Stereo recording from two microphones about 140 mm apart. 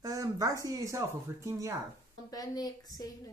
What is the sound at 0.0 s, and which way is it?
Speech, 25° right (ahead or behind).